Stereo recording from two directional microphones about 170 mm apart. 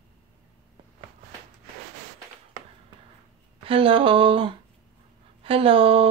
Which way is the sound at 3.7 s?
30° right (ahead or behind).